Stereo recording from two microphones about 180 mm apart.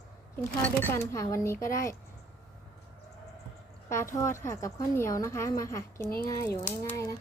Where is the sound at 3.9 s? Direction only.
15° left (ahead or behind).